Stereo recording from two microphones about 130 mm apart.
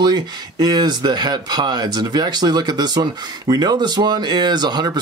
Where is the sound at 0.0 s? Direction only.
35° right (ahead or behind).